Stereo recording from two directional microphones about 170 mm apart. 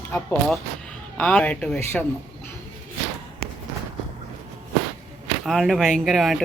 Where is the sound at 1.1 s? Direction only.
5° left (ahead or behind).